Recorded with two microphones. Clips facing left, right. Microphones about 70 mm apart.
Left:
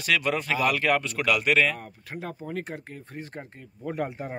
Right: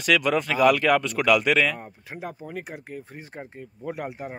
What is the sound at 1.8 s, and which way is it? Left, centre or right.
Speech, right.